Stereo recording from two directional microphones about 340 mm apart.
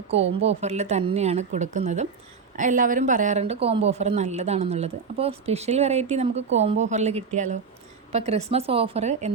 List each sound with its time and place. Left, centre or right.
0.4 s speech: centre